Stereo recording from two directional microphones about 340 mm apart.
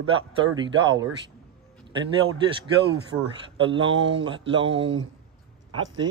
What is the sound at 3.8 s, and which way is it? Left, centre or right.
Speech, right.